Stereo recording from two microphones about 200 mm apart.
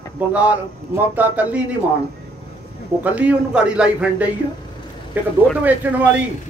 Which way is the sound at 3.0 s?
5° right (ahead or behind).